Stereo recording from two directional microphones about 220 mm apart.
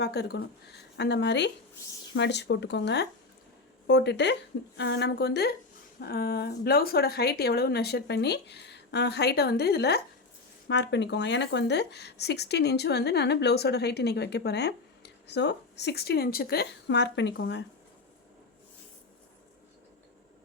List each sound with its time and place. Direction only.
0.0 s a woman's voice: 50° left (ahead or behind)